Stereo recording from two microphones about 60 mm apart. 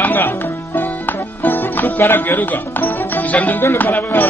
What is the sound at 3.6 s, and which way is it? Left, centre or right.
Speech, left.